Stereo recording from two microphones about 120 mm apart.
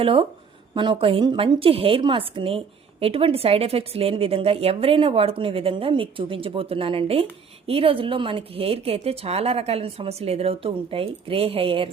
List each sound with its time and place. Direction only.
0.0 s a woman's voice: 50° right (ahead or behind)